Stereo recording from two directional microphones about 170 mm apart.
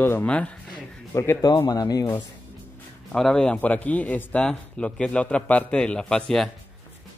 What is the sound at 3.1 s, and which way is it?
Speech, 5° left (ahead or behind).